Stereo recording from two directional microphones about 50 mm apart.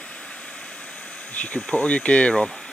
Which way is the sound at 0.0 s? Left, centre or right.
Left.